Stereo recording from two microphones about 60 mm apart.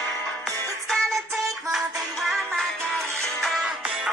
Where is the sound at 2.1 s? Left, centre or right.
Centre.